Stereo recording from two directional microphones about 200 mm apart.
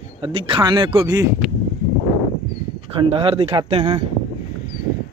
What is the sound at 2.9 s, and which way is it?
Speech, 25° right (ahead or behind).